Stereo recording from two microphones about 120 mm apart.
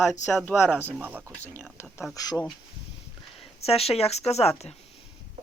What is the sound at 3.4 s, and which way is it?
Speech, 55° left (ahead or behind).